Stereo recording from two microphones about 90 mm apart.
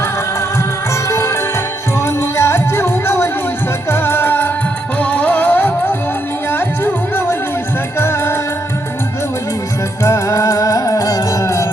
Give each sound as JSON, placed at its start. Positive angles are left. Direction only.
{"t": 2.0, "sound": "music", "side_deg": 30}
{"t": 10.0, "sound": "music", "side_deg": 35}